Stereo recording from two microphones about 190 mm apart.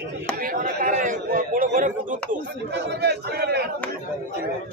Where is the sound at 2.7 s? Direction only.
60° right (ahead or behind).